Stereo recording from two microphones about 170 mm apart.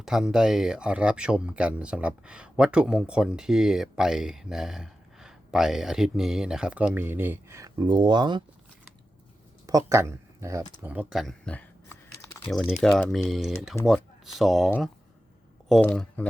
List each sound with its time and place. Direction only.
0.0 s speech: 5° right (ahead or behind); by 8.4 s 25° right (ahead or behind)
9.6 s speech: 20° right (ahead or behind)
10.8 s speech: 5° right (ahead or behind)
15.7 s speech: 5° left (ahead or behind)